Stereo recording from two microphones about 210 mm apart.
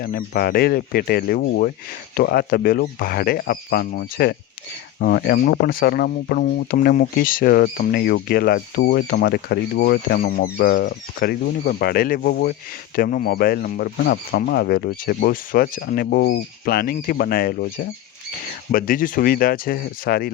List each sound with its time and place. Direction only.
0.0 s speech: 45° left (ahead or behind)